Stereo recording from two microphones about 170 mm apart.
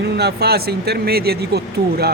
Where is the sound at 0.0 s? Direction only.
75° right (ahead or behind).